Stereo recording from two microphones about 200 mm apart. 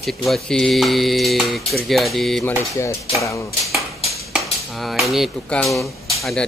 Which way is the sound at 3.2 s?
15° left (ahead or behind).